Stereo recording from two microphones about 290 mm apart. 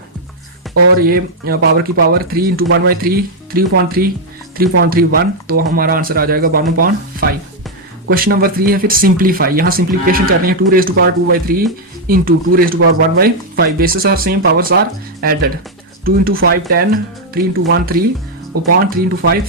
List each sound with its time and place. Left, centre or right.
0.9 s speech: right
8.1 s speech: right